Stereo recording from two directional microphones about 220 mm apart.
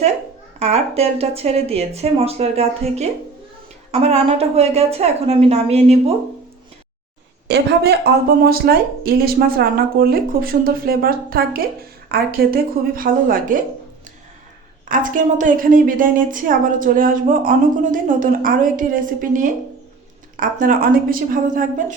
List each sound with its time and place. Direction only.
0.6 s speech: 30° right (ahead or behind)
7.4 s a woman's voice: 50° right (ahead or behind)
14.8 s a woman's voice: 35° right (ahead or behind)